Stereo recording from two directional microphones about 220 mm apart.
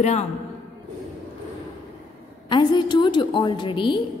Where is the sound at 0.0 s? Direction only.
30° left (ahead or behind).